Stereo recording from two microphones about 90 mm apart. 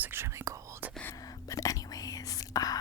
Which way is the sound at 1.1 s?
45° left (ahead or behind).